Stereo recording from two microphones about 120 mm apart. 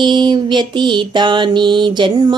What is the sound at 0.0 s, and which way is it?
Music, 40° right (ahead or behind).